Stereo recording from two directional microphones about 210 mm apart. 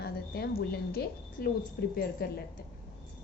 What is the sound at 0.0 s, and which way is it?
A woman's voice, 50° left (ahead or behind).